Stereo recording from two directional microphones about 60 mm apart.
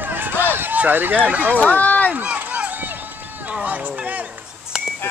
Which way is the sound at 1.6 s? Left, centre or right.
Left.